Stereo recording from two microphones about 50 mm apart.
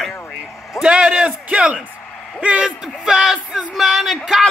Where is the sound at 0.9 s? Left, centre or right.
Right.